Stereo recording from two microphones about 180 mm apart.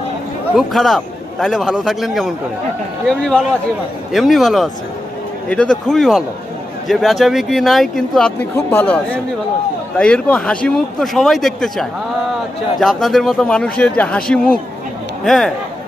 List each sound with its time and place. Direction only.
0.6 s a man's voice: centre (ahead or behind)